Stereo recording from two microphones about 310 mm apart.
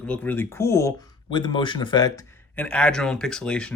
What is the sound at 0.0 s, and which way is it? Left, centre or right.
Speech, centre.